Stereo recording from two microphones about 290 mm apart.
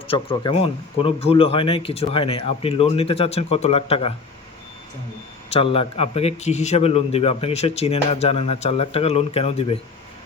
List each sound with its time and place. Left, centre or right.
0.1 s a man's voice: centre
5.5 s a man's voice: centre